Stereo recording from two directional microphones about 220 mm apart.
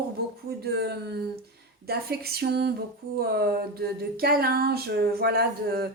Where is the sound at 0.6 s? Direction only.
45° right (ahead or behind).